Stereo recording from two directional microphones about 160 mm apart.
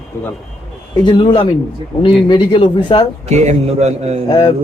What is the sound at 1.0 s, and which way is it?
A man's voice, 30° left (ahead or behind).